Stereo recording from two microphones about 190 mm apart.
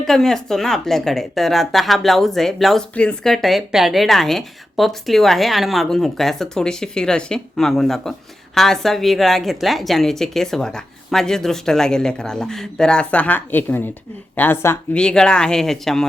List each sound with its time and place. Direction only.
0.0 s speech: centre (ahead or behind)